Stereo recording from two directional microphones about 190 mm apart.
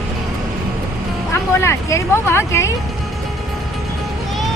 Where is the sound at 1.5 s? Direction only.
15° left (ahead or behind).